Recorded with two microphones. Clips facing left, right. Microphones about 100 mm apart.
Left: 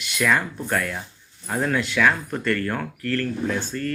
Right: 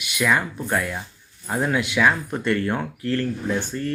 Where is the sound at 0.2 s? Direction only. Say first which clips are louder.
Even; 10° right (ahead or behind).